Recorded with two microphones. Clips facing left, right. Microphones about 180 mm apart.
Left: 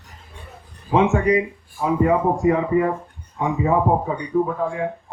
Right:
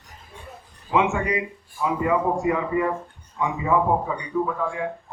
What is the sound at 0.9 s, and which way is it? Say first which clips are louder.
A man's voice: left 5 dB; 40° left (ahead or behind).